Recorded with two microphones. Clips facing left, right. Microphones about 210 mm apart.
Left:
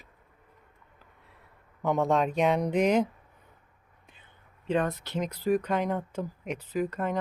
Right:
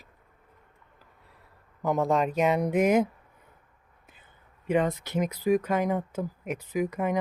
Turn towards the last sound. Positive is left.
turn(degrees=-15)  # may be behind; listen again after turning